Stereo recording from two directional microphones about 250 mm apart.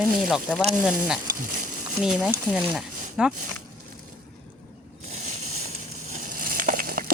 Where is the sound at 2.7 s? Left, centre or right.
Centre.